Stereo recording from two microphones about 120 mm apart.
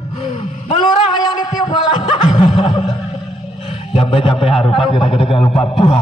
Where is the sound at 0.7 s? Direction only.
50° left (ahead or behind).